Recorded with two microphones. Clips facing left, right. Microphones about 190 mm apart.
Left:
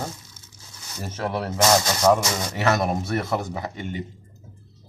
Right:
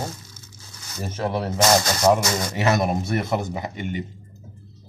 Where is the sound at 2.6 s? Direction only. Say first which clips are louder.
Right 1 dB; 15° right (ahead or behind).